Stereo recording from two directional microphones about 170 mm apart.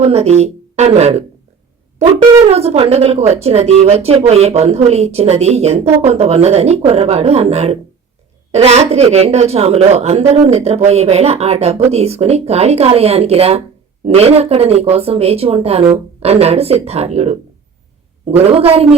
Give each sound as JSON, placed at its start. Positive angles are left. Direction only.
{"t": 0.0, "sound": "speech", "side_deg": -40}
{"t": 2.5, "sound": "speech", "side_deg": -40}